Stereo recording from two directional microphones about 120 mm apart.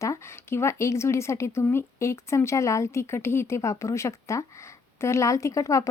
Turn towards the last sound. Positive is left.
turn(degrees=25)  # may be behind; listen again after turning